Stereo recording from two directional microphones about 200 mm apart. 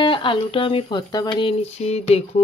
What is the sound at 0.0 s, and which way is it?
Speech, 25° left (ahead or behind).